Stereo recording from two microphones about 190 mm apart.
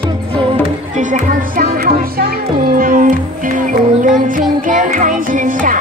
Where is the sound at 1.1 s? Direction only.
45° right (ahead or behind).